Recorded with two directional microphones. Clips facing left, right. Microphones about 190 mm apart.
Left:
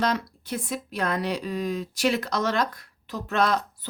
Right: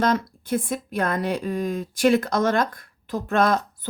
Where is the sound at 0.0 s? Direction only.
50° right (ahead or behind).